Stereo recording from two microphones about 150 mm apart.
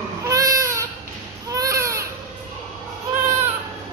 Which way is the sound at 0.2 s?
20° right (ahead or behind).